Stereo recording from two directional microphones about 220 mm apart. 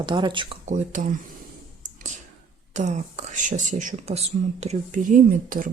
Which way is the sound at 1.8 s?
35° right (ahead or behind).